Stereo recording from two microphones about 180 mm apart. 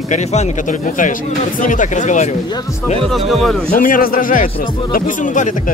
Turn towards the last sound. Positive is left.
turn(degrees=45)  # may be behind; listen again after turning